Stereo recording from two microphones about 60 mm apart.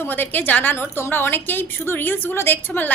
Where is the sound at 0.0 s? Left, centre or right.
Left.